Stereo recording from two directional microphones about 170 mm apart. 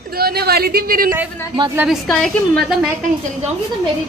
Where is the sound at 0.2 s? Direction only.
65° right (ahead or behind).